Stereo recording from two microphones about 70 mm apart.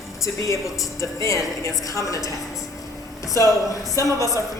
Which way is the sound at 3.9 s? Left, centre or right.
Left.